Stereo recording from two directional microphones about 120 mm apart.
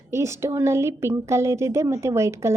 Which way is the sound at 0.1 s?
25° right (ahead or behind).